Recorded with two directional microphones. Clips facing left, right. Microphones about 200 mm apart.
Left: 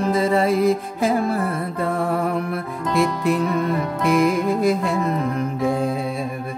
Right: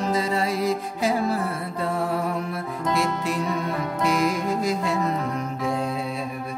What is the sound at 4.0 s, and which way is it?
Music, 55° left (ahead or behind).